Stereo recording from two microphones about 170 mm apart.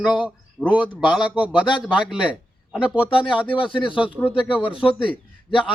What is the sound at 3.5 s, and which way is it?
Speech, 30° left (ahead or behind).